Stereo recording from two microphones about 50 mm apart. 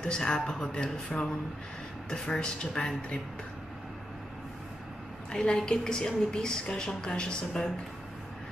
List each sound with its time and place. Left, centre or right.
0.0 s a woman's voice: centre
5.3 s a woman's voice: centre